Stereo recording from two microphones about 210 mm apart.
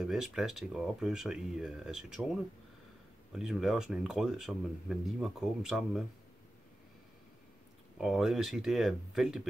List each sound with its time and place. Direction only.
0.0 s speech: 5° right (ahead or behind)
8.0 s speech: centre (ahead or behind)